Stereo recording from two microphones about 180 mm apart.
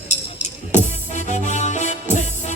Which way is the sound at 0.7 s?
40° left (ahead or behind).